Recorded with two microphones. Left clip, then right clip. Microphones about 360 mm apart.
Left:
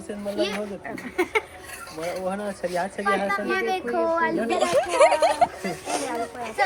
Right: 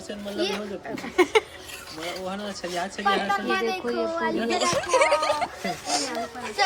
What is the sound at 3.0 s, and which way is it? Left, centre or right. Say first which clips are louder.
Speech: right 1 dB; centre.